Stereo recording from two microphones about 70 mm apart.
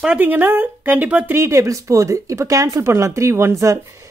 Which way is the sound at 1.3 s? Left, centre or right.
Right.